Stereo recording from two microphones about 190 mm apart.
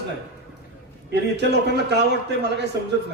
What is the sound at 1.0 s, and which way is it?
A man's voice, 60° right (ahead or behind).